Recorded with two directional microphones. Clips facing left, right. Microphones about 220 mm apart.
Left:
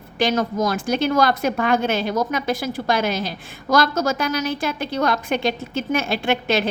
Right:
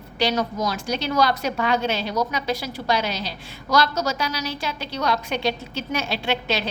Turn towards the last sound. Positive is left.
turn(degrees=50)  # may be behind; listen again after turning